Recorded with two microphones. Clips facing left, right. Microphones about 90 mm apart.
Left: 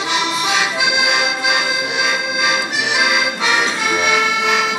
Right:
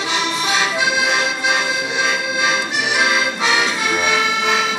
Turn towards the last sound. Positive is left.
turn(degrees=5)  # may be behind; listen again after turning